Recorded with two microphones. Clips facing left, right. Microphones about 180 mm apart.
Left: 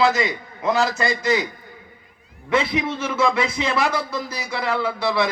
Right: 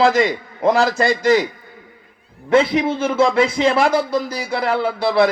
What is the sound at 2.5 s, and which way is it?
Speech, 30° right (ahead or behind).